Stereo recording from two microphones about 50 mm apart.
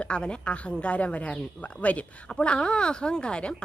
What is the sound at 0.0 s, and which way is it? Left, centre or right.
A woman's voice, left.